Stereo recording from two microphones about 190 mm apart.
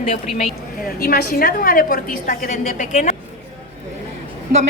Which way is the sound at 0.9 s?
50° left (ahead or behind).